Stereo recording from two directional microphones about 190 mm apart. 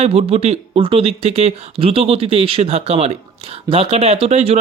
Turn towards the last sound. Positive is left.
turn(degrees=-35)  # may be behind; listen again after turning